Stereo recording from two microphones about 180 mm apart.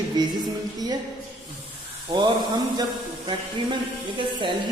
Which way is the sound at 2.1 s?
25° right (ahead or behind).